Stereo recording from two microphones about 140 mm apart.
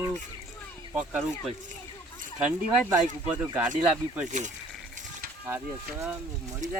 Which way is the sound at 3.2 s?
10° right (ahead or behind).